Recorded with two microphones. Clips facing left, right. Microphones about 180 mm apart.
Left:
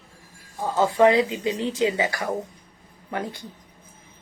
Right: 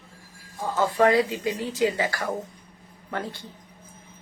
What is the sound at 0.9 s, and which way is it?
A woman's voice, 20° left (ahead or behind).